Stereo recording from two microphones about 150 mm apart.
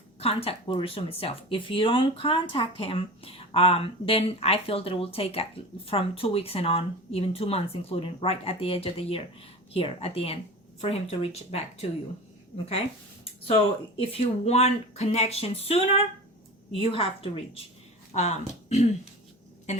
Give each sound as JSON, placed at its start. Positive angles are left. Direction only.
{"t": 0.2, "sound": "speech", "side_deg": 40}
{"t": 13.5, "sound": "speech", "side_deg": 40}
{"t": 18.1, "sound": "speech", "side_deg": 50}